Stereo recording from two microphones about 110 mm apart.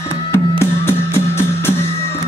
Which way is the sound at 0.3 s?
25° left (ahead or behind).